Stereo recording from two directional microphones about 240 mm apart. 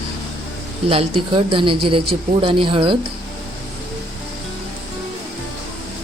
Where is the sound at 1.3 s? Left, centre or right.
Right.